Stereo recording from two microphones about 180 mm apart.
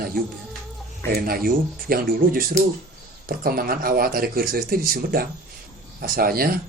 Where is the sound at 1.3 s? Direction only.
55° right (ahead or behind).